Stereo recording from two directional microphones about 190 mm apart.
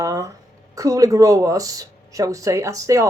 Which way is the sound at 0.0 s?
15° right (ahead or behind).